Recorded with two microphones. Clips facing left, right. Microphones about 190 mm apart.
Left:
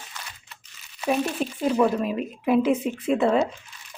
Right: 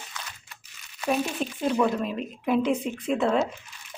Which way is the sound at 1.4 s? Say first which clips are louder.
Left 3 dB; 5° left (ahead or behind).